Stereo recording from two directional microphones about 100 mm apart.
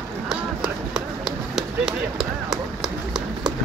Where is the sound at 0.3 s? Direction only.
5° right (ahead or behind).